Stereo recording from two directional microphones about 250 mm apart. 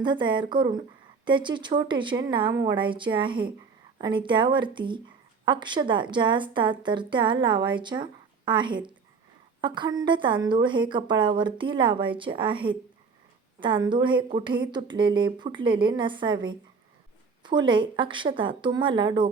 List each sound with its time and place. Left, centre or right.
0.0 s a woman's voice: centre